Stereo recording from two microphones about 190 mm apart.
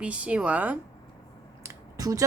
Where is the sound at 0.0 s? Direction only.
5° right (ahead or behind).